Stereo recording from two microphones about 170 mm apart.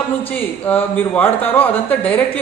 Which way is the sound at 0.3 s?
10° left (ahead or behind).